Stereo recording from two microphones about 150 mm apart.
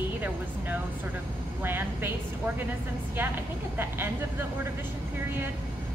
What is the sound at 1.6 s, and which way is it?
Speech, 15° right (ahead or behind).